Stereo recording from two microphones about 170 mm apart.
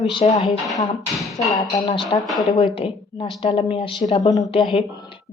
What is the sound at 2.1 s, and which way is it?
A woman's voice, 35° left (ahead or behind).